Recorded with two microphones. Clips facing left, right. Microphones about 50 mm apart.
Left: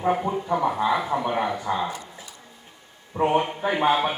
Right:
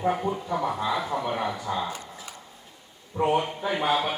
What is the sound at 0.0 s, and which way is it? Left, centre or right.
Speech, centre.